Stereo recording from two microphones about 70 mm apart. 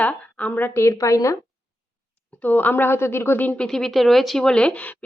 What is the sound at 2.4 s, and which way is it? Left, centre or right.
A woman's voice, left.